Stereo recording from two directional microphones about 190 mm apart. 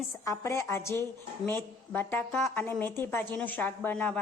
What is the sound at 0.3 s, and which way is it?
A woman's voice, 15° left (ahead or behind).